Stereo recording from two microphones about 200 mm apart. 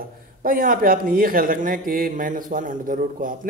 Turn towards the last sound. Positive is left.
turn(degrees=-45)  # may be behind; listen again after turning